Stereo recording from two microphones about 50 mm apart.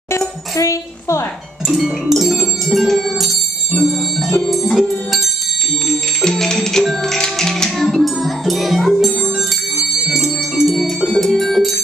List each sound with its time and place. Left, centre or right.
0.6 s a woman's voice: left
1.7 s bell: centre
4.6 s music: centre
5.9 s music: centre